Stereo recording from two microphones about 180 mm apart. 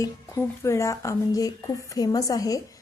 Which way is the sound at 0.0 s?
15° left (ahead or behind).